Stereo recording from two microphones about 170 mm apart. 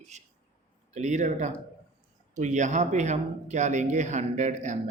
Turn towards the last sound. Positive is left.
turn(degrees=-45)  # may be behind; listen again after turning